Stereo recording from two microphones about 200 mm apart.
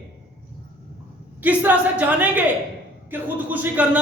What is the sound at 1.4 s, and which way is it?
A woman's voice, 10° right (ahead or behind).